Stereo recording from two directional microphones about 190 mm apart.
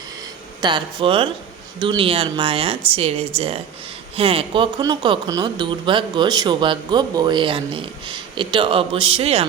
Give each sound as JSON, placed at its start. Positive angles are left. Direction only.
{"t": 0.6, "sound": "speech", "side_deg": -25}